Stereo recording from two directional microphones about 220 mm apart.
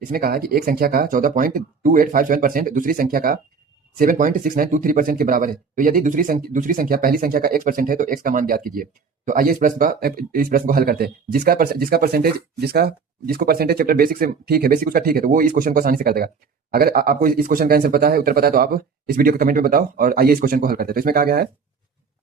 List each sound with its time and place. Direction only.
0.1 s speech: 40° right (ahead or behind)